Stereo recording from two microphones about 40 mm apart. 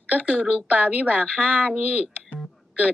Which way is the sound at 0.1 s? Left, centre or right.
Right.